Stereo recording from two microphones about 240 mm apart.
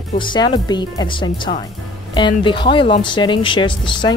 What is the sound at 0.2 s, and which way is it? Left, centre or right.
Speech, centre.